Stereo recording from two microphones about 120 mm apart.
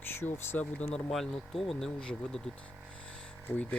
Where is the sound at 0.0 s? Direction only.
15° left (ahead or behind).